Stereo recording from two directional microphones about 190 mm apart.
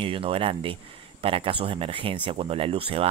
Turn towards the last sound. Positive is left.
turn(degrees=-30)  # may be behind; listen again after turning